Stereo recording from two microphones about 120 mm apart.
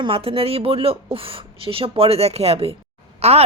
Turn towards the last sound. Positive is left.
turn(degrees=-60)  # may be behind; listen again after turning